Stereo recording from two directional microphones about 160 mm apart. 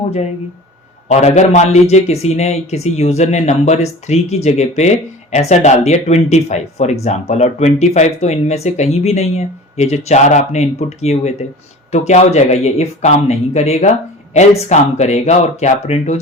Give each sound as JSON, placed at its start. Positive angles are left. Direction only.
{"t": 1.0, "sound": "a man's voice", "side_deg": 45}